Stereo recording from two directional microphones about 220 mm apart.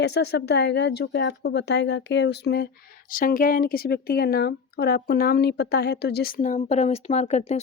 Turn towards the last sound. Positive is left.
turn(degrees=30)  # may be behind; listen again after turning